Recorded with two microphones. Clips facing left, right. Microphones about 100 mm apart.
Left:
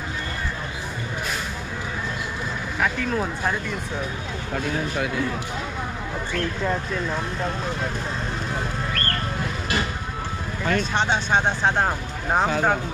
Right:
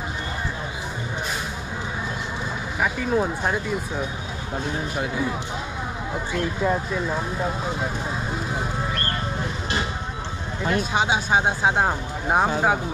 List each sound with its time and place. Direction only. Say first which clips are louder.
2.8 s speech: right 2 dB; 15° right (ahead or behind)
4.6 s speech: left 2 dB; 15° right (ahead or behind)
6.3 s speech: right 2 dB; 10° right (ahead or behind)
8.5 s a sound: right 1 dB; 10° right (ahead or behind)
10.7 s speech: even; 10° right (ahead or behind)